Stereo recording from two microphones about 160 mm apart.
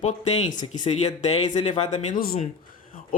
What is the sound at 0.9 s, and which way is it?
Speech, 45° left (ahead or behind).